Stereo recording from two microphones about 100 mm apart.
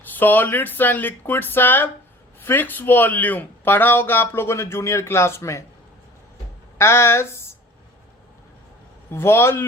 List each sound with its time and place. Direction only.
0.2 s speech: 20° left (ahead or behind)
6.7 s speech: 25° left (ahead or behind)
9.1 s speech: 25° left (ahead or behind)